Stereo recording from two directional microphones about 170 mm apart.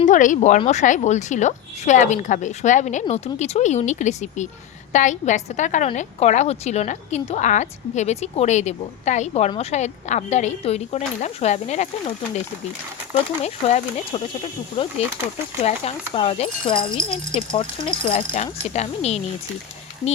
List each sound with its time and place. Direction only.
0.0 s a woman's voice: 50° left (ahead or behind)
13.4 s a woman's voice: 40° left (ahead or behind)